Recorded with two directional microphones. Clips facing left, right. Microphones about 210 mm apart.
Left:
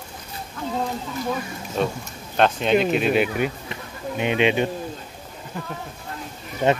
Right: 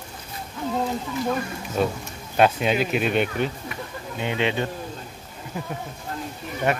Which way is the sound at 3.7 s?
20° left (ahead or behind).